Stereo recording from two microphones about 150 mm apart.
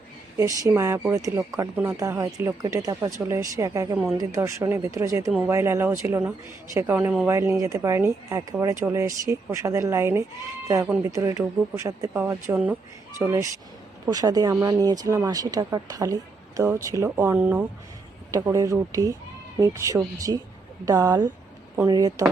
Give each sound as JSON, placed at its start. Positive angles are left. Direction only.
{"t": 0.3, "sound": "speech", "side_deg": -20}